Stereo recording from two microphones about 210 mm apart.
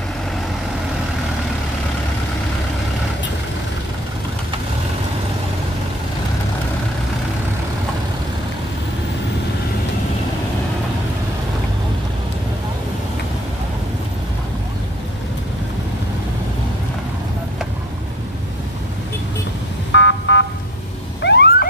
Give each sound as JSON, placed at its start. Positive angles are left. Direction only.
{"t": 19.9, "sound": "car alarm", "side_deg": 60}